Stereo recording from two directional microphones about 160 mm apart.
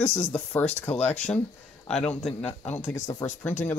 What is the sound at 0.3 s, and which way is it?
Speech, 15° left (ahead or behind).